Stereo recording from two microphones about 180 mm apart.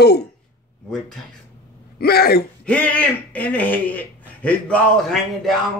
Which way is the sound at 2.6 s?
10° left (ahead or behind).